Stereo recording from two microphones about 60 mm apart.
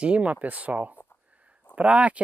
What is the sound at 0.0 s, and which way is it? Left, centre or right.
Speech, right.